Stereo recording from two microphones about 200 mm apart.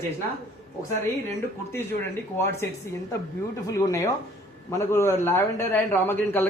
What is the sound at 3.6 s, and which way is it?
A man's voice, 15° left (ahead or behind).